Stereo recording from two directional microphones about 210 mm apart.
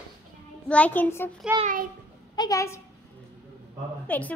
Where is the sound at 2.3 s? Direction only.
20° left (ahead or behind).